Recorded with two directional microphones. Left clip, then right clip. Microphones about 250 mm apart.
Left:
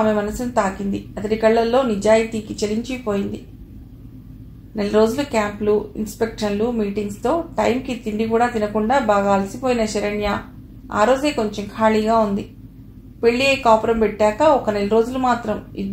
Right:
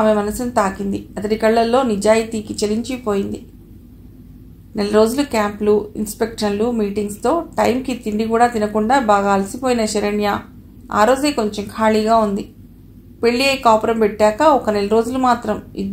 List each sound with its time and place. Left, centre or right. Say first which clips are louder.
0.0 s speech: right 3 dB; right
4.7 s speech: right 2 dB; right